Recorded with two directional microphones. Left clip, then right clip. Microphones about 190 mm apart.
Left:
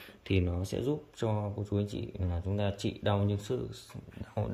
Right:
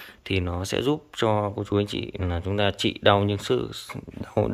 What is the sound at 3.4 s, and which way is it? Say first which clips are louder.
Speech: right 11 dB; 45° right (ahead or behind).